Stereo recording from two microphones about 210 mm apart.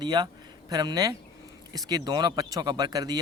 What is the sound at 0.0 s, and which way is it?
Speech, 20° right (ahead or behind).